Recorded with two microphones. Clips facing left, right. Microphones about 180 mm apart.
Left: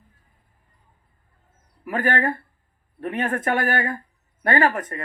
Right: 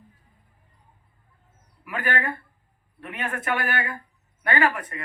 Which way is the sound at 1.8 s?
40° left (ahead or behind).